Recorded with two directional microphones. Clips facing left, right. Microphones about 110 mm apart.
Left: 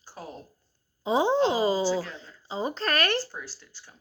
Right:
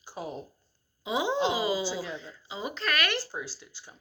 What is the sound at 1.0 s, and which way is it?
Speech, 35° left (ahead or behind).